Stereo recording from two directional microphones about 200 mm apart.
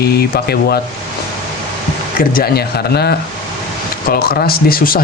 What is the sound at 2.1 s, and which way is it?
Speech, 50° left (ahead or behind).